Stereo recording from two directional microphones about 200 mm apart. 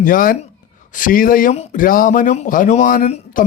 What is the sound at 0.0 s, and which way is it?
Speech, 45° left (ahead or behind).